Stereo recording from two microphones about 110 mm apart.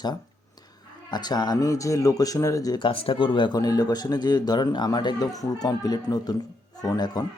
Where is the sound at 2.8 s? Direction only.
55° left (ahead or behind); by 7.2 s 35° left (ahead or behind).